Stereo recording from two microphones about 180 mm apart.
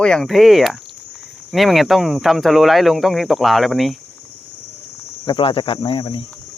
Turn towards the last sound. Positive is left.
turn(degrees=30)  # may be behind; listen again after turning